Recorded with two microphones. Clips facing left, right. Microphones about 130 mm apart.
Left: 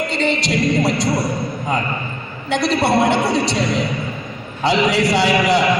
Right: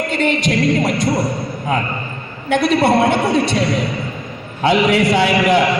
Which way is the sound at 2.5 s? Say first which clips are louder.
Right 3 dB; 50° right (ahead or behind).